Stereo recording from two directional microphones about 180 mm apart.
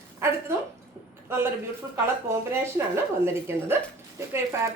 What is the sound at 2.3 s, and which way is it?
Speech, 15° right (ahead or behind).